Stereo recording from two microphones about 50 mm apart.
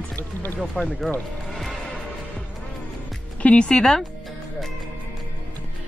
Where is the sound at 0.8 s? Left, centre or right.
Centre.